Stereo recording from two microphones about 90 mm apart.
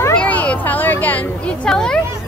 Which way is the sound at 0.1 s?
15° left (ahead or behind).